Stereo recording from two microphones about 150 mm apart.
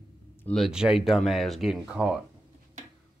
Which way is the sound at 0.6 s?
5° right (ahead or behind).